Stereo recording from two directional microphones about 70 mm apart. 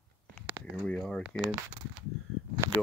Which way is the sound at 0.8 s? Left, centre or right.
Centre.